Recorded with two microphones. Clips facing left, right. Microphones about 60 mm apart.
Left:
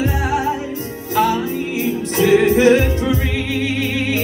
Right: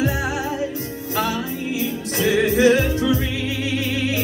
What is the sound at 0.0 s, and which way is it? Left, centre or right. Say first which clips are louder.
Music: left 4 dB; left.